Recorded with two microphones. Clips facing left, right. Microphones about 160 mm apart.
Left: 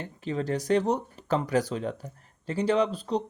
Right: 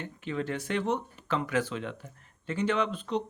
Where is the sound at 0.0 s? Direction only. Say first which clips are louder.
Left 3 dB; 35° left (ahead or behind).